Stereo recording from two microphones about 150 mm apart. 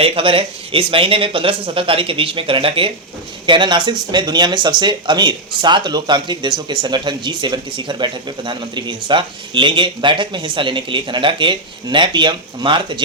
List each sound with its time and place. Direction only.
0.0 s speech: 40° right (ahead or behind)